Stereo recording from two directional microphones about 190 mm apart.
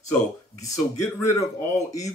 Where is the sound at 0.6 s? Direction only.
15° left (ahead or behind).